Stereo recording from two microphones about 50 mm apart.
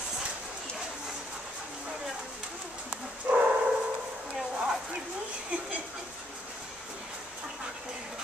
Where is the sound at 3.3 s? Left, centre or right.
Right.